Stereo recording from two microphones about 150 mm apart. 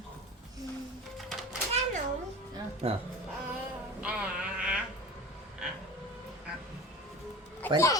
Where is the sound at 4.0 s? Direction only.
5° right (ahead or behind).